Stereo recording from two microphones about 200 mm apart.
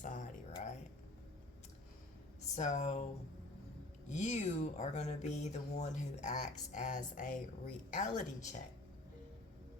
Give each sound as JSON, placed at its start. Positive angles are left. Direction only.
{"t": 0.0, "sound": "a sound", "side_deg": 40}
{"t": 2.6, "sound": "speech", "side_deg": 35}
{"t": 4.1, "sound": "speech", "side_deg": 35}